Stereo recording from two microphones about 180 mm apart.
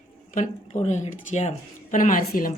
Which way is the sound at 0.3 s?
40° left (ahead or behind).